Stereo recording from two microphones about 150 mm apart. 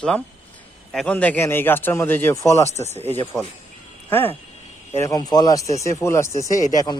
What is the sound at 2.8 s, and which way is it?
Speech, 45° right (ahead or behind).